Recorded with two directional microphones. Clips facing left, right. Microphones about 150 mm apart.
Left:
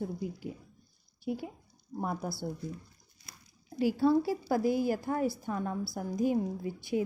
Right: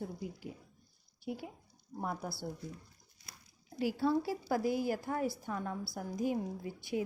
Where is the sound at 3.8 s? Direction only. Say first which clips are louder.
Left 6 dB; 30° left (ahead or behind).